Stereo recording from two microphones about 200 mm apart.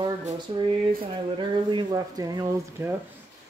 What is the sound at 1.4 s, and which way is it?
Speech, 25° right (ahead or behind).